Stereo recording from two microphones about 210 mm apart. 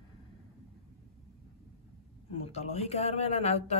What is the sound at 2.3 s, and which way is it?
A man's voice, 30° left (ahead or behind).